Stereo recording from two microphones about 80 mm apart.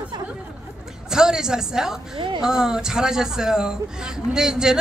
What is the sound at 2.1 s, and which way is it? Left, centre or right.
Speech, right.